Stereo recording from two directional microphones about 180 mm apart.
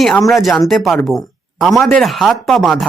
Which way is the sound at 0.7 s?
Centre (ahead or behind).